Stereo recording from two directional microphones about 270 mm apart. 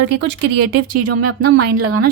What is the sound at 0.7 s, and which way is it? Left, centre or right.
A woman's voice, right.